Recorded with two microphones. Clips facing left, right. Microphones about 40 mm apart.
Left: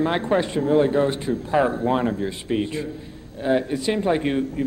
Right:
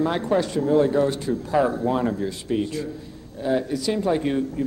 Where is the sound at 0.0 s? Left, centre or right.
Left.